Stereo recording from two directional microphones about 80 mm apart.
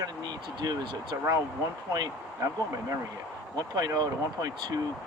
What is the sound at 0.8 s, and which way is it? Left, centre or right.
Speech, right.